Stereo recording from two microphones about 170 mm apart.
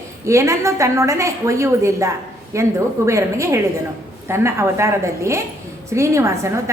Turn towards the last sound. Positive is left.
turn(degrees=-15)  # may be behind; listen again after turning